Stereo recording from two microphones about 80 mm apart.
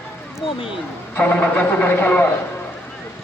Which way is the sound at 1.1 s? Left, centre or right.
Centre.